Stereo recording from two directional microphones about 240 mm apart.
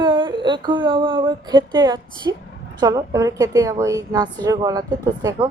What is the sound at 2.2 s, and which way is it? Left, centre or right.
A woman's voice, centre.